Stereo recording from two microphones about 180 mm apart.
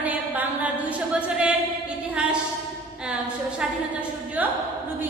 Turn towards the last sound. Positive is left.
turn(degrees=-10)  # may be behind; listen again after turning